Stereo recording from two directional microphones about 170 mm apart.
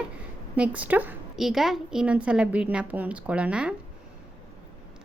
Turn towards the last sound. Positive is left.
turn(degrees=-5)  # may be behind; listen again after turning